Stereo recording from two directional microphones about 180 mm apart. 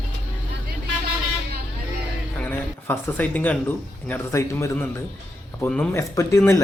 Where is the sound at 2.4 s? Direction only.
10° left (ahead or behind).